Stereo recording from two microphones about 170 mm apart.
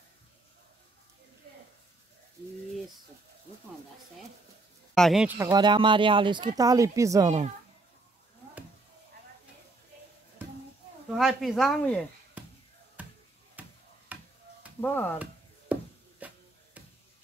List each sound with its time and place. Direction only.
4.9 s speech: centre (ahead or behind)
5.4 s speech: 25° right (ahead or behind)
7.2 s speech: 40° right (ahead or behind)
11.1 s speech: centre (ahead or behind)
12.4 s basketball bounce: 10° right (ahead or behind)
13.6 s a sound: 10° right (ahead or behind)
14.8 s stir: 10° left (ahead or behind)
15.7 s chopping: 10° right (ahead or behind)
16.2 s a sound: 10° right (ahead or behind)